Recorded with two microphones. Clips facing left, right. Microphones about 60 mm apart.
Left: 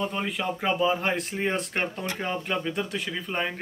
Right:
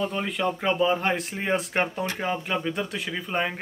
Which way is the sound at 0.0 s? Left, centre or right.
Centre.